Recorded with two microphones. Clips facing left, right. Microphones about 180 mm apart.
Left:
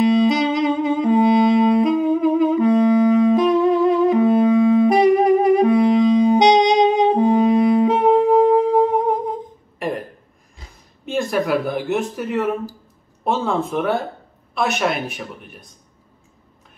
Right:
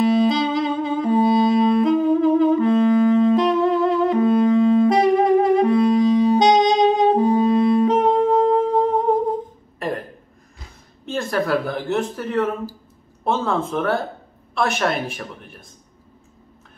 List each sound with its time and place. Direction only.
0.0 s music: 20° left (ahead or behind)
3.3 s saxophone: 15° left (ahead or behind)
11.1 s speech: 15° left (ahead or behind)